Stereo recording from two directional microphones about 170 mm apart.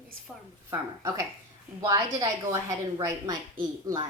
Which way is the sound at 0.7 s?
20° right (ahead or behind).